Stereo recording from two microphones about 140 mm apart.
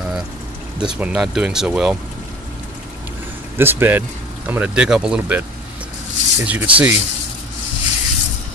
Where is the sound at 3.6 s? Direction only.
15° right (ahead or behind).